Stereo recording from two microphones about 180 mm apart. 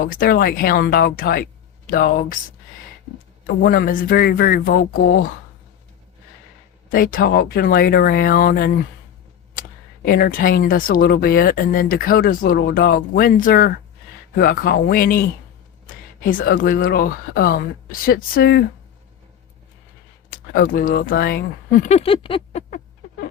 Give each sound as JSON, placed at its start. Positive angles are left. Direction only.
{"t": 0.0, "sound": "speech", "side_deg": 55}
{"t": 3.4, "sound": "speech", "side_deg": 55}
{"t": 6.9, "sound": "speech", "side_deg": 50}
{"t": 9.6, "sound": "a sound", "side_deg": 50}
{"t": 10.1, "sound": "speech", "side_deg": 55}
{"t": 20.3, "sound": "speech", "side_deg": 50}
{"t": 21.8, "sound": "a sound", "side_deg": 35}